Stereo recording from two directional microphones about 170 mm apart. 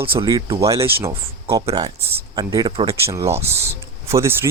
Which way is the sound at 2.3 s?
25° right (ahead or behind).